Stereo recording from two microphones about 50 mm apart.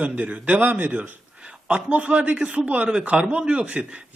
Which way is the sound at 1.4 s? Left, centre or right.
Centre.